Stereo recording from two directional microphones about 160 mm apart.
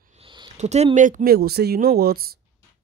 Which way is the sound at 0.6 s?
45° right (ahead or behind).